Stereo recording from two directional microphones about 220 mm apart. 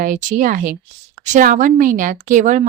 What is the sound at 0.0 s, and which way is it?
A woman's voice, 35° right (ahead or behind).